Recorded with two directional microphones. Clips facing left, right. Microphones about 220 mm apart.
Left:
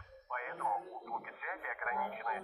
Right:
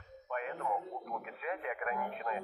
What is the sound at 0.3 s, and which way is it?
Radio, 30° right (ahead or behind).